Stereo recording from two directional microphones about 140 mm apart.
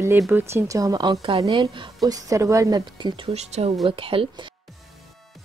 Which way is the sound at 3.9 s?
40° right (ahead or behind).